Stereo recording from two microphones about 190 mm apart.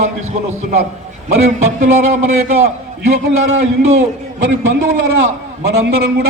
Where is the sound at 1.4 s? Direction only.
40° right (ahead or behind).